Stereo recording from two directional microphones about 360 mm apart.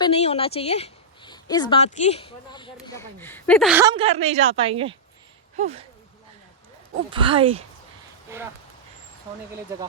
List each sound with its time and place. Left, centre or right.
0.0 s a woman's voice: centre
7.1 s speech: centre